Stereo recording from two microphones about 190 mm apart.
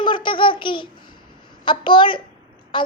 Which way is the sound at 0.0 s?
25° left (ahead or behind).